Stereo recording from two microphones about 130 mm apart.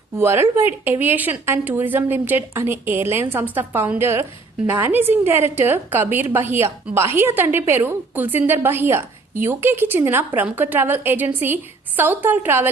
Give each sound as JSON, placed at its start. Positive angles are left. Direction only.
{"t": 0.2, "sound": "a woman's voice", "side_deg": -20}